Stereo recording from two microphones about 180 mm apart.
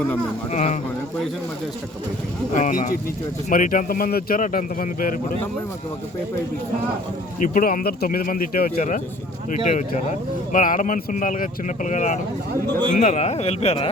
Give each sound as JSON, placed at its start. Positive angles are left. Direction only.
{"t": 0.5, "sound": "speech", "side_deg": 40}
{"t": 2.6, "sound": "speech", "side_deg": 45}
{"t": 7.3, "sound": "speech", "side_deg": 45}